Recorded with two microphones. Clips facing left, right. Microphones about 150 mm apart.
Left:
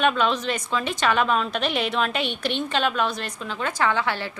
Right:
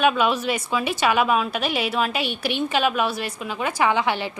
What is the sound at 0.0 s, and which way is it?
A woman's voice, 10° right (ahead or behind).